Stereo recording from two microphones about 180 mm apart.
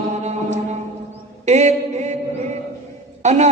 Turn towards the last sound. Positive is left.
turn(degrees=-40)  # may be behind; listen again after turning